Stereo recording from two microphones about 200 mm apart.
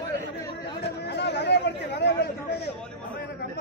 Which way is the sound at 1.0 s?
60° left (ahead or behind).